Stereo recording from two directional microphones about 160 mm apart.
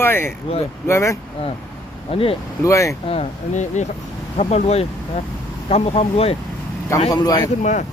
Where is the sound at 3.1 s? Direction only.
45° left (ahead or behind).